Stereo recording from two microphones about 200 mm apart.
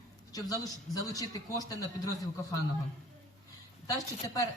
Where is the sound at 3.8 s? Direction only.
15° left (ahead or behind).